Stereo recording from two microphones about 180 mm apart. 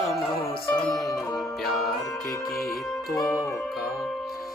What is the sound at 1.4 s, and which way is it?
Music, centre (ahead or behind).